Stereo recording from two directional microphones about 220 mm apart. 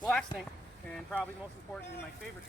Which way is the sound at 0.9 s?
5° left (ahead or behind).